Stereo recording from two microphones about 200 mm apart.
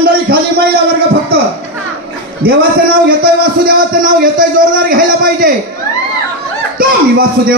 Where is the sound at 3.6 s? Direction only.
45° right (ahead or behind).